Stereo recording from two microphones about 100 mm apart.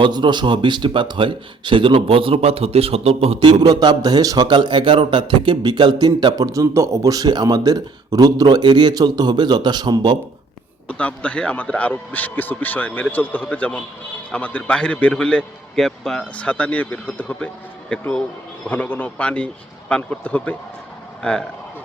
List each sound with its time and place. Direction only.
0.0 s speech: 50° right (ahead or behind); by 3.3 s 90° right
3.6 s a man's voice: 40° right (ahead or behind)
10.8 s a man's voice: 15° left (ahead or behind)